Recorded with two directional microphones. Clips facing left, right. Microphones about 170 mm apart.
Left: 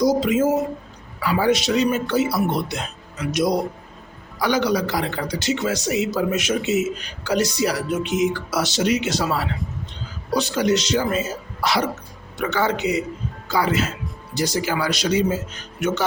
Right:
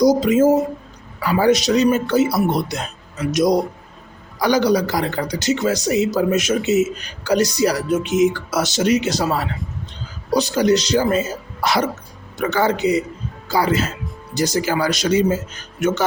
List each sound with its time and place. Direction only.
0.0 s speech: 40° right (ahead or behind)